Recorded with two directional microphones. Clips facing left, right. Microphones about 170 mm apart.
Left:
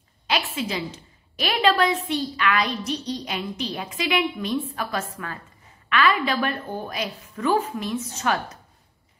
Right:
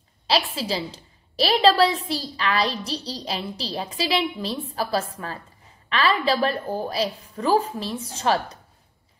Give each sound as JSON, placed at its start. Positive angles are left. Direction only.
{"t": 0.6, "sound": "a woman's voice", "side_deg": -35}